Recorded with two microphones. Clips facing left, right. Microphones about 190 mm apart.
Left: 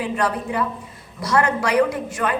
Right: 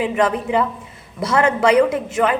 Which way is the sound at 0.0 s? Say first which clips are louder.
Right 4 dB; 20° right (ahead or behind).